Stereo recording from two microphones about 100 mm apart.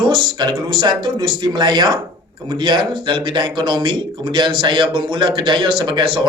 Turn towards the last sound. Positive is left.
turn(degrees=-55)  # may be behind; listen again after turning